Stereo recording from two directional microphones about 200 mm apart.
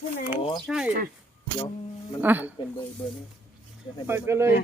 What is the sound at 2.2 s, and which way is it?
Speech, 10° right (ahead or behind).